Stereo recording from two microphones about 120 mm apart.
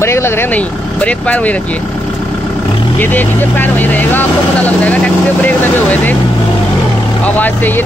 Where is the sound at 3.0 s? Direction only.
15° left (ahead or behind).